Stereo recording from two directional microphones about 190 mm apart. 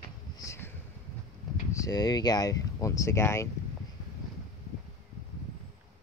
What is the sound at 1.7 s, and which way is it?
Speech, 20° left (ahead or behind).